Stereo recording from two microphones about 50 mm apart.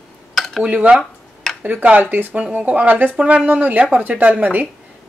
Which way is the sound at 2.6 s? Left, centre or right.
Right.